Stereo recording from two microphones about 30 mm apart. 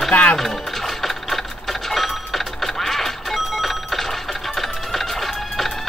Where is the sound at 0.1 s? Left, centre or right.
Left.